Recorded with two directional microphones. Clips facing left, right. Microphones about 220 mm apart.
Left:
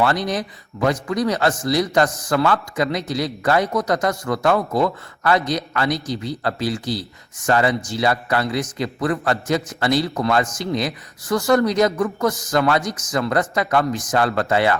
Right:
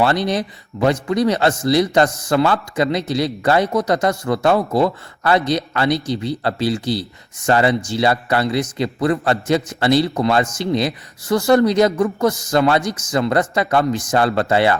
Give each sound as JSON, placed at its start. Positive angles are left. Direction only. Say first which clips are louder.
{"t": 0.0, "sound": "a man's voice", "louder": "right 3 dB", "side_deg": -30}